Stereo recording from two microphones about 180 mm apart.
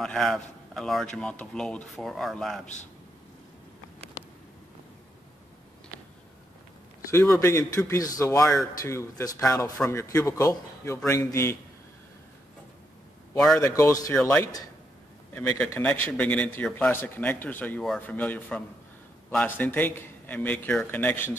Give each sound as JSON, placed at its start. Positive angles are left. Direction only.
{"t": 0.0, "sound": "a man's voice", "side_deg": 0}
{"t": 7.3, "sound": "a man's voice", "side_deg": 15}
{"t": 13.6, "sound": "a man's voice", "side_deg": 15}